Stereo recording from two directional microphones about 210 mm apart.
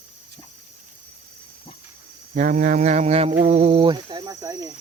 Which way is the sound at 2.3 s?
40° right (ahead or behind).